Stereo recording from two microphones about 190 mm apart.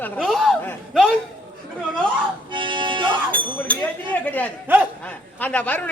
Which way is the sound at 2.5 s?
25° right (ahead or behind).